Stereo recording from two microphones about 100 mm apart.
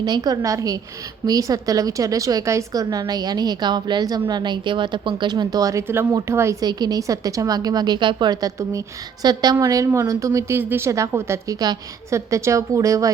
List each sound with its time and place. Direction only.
0.0 s a woman's voice: 45° right (ahead or behind)
6.6 s a woman's voice: 45° right (ahead or behind)